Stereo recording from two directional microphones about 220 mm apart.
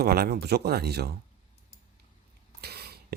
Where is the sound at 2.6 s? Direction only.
45° right (ahead or behind).